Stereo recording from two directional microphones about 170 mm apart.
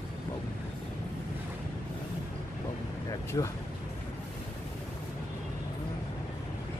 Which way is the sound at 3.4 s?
25° left (ahead or behind).